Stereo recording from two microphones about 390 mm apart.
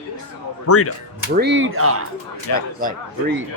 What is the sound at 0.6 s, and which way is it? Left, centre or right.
Speech, left.